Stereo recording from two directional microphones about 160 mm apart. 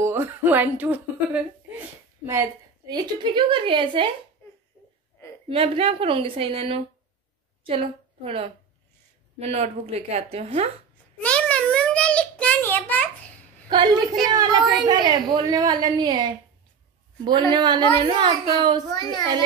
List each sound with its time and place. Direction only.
0.0 s a woman's voice: 15° right (ahead or behind)
2.9 s speech: 30° right (ahead or behind)
5.5 s a woman's voice: 35° right (ahead or behind)
11.2 s a sound: 10° left (ahead or behind)
13.7 s a woman's voice: 25° right (ahead or behind)